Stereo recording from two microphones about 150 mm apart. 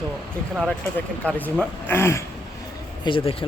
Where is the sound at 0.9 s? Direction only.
10° left (ahead or behind).